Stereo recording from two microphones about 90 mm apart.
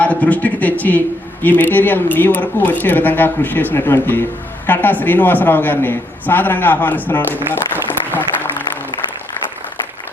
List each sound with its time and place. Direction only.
0.0 s a man's voice: 15° left (ahead or behind)
7.5 s applause: 20° left (ahead or behind)